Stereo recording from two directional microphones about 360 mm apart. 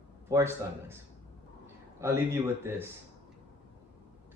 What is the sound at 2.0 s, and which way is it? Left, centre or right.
Speech, centre.